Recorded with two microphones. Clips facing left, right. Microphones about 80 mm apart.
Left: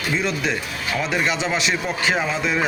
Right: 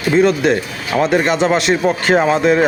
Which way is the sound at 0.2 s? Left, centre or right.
Right.